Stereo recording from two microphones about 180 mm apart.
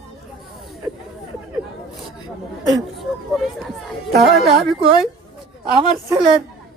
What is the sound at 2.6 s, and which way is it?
Speech, centre (ahead or behind).